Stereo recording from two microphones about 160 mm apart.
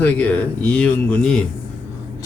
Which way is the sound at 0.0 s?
10° left (ahead or behind).